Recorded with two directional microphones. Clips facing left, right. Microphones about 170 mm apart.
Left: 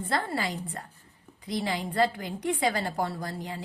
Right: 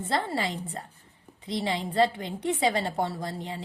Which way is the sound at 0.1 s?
25° right (ahead or behind).